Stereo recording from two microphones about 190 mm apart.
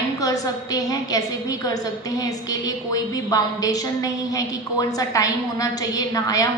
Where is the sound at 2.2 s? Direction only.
20° left (ahead or behind).